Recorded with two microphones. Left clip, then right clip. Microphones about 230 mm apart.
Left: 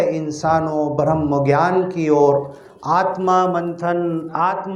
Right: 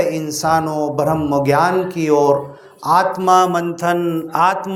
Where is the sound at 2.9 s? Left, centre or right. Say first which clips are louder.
Right 3 dB; right.